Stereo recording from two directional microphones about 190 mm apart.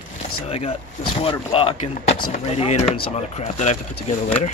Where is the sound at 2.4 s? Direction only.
30° left (ahead or behind).